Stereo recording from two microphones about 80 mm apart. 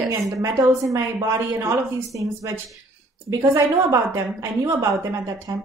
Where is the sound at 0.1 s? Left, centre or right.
Right.